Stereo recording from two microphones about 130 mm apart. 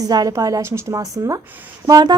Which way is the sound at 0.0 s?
30° right (ahead or behind).